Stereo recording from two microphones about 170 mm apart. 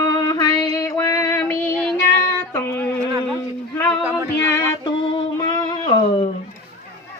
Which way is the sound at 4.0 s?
5° right (ahead or behind).